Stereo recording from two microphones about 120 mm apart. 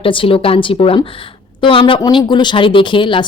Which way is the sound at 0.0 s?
50° left (ahead or behind).